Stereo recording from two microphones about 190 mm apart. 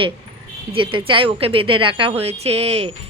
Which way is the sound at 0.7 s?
25° right (ahead or behind).